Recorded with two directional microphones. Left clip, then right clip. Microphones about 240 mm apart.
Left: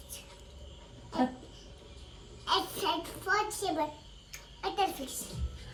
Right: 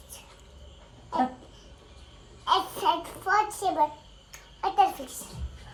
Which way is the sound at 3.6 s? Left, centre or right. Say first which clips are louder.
Right 7 dB; centre.